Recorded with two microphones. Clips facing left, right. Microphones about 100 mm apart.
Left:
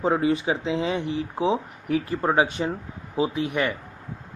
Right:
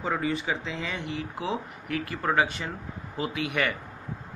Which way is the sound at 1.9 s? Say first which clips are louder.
Left 7 dB; 60° right (ahead or behind).